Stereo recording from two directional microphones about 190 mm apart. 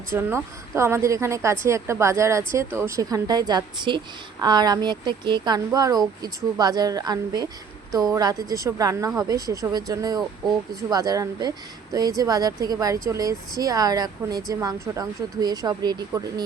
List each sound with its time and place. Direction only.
0.1 s a woman's voice: 15° right (ahead or behind)